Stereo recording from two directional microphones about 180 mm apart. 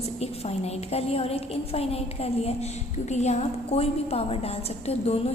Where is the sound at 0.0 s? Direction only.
35° left (ahead or behind).